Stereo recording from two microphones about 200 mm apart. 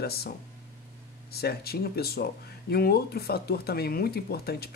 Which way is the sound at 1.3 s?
50° left (ahead or behind).